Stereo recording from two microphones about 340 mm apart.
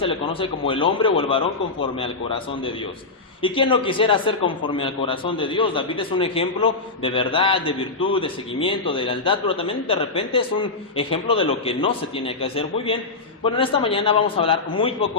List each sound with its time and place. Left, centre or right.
0.0 s a man's voice: centre
3.4 s a man's voice: centre